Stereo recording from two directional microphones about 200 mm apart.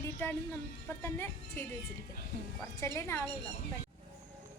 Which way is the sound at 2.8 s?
15° left (ahead or behind).